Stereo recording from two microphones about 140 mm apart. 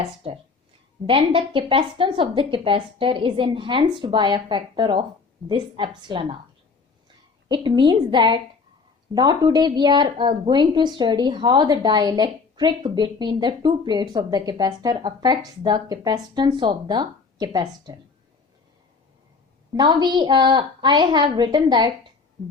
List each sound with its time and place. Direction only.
0.2 s a woman's voice: 45° right (ahead or behind)
7.4 s a woman's voice: 35° right (ahead or behind)
19.7 s a woman's voice: 30° right (ahead or behind)